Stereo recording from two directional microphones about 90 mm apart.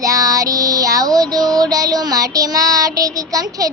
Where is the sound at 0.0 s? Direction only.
40° right (ahead or behind).